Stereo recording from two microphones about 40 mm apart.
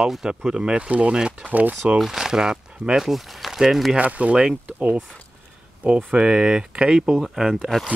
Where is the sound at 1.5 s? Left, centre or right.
Right.